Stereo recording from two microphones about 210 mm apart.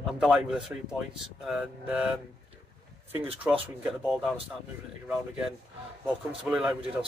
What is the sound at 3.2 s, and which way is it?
Speech, 25° right (ahead or behind).